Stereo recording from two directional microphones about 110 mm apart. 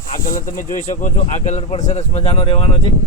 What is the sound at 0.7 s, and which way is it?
Speech, 90° left.